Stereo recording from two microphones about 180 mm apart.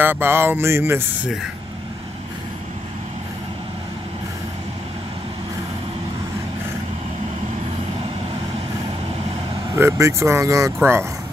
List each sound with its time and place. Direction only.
0.0 s speech: 10° right (ahead or behind)
9.8 s speech: 15° right (ahead or behind)